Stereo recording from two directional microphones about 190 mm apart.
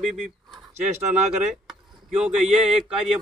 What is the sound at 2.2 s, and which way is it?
Speech, 5° right (ahead or behind).